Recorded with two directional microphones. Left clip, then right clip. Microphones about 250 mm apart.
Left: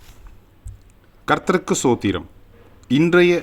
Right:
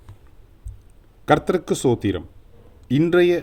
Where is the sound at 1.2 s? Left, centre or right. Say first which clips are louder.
Even; centre.